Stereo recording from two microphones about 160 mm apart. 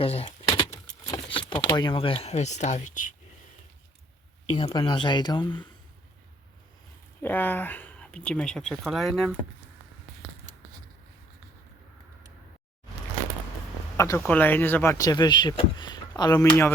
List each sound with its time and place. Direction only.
0.0 s speech: 40° left (ahead or behind)
0.4 s keys jangling: 30° left (ahead or behind)
1.1 s speech: 30° left (ahead or behind); by 3.2 s 55° left (ahead or behind)
4.5 s speech: 35° left (ahead or behind)
7.2 s speech: 10° left (ahead or behind)
13.9 s a sound: 20° left (ahead or behind)
14.2 s speech: 10° left (ahead or behind)